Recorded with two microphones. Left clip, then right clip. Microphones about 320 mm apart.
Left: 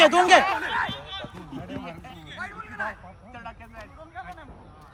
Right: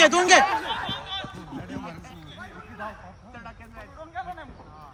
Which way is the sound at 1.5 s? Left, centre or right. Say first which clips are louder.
Left 2 dB; left.